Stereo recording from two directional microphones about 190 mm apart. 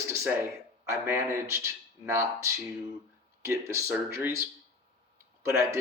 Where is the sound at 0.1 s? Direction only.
10° right (ahead or behind).